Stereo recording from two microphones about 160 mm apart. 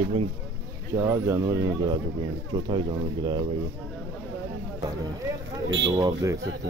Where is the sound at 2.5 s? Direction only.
30° right (ahead or behind).